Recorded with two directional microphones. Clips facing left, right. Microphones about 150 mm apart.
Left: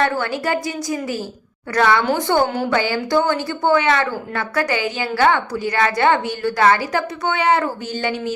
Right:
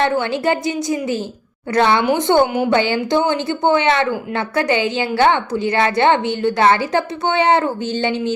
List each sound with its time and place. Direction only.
0.0 s a woman's voice: 25° right (ahead or behind)